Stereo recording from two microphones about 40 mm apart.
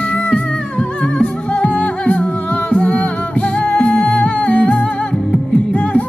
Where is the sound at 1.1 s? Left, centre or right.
Left.